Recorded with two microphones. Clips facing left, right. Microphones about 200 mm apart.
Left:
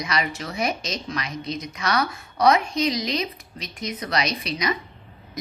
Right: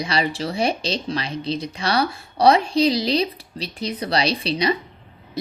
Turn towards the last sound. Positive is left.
turn(degrees=-30)  # may be behind; listen again after turning